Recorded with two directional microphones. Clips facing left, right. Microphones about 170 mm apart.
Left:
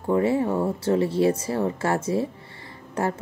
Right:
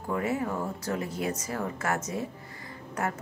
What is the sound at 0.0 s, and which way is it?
Speech, 30° left (ahead or behind).